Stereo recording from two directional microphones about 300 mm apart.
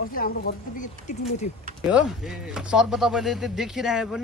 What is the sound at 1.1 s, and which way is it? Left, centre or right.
Speech, left.